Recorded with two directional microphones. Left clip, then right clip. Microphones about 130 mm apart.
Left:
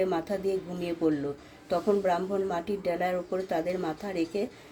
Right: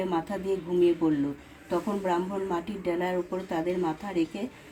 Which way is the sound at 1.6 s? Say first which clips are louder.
Left 3 dB; 35° left (ahead or behind).